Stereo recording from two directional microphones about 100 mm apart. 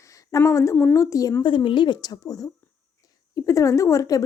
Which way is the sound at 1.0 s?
35° left (ahead or behind).